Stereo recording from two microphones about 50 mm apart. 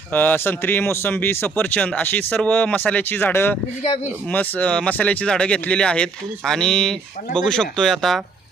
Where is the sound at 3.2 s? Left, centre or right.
Left.